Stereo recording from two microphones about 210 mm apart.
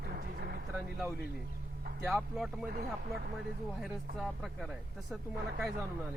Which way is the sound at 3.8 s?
Centre (ahead or behind).